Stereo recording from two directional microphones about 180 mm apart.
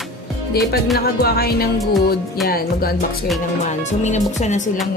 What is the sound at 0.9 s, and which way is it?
Music, 60° left (ahead or behind).